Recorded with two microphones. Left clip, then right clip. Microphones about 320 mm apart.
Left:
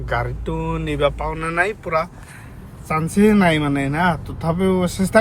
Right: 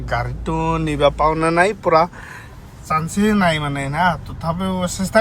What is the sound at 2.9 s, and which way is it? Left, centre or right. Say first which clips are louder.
Speech: left 1 dB; right.